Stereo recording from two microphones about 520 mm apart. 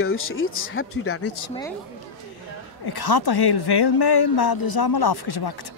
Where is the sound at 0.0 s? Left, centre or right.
Left.